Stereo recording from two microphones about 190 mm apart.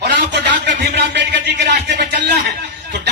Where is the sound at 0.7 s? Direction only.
60° right (ahead or behind).